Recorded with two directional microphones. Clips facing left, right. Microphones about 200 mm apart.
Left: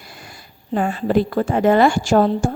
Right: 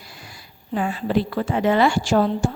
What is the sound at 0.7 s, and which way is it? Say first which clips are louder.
A woman's voice: left 4 dB; 45° left (ahead or behind).